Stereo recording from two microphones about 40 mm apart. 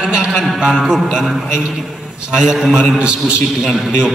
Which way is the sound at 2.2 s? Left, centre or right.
Centre.